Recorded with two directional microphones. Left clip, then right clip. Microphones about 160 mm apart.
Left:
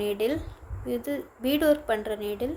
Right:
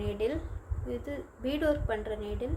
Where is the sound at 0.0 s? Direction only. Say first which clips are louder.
Left 5 dB; 45° left (ahead or behind).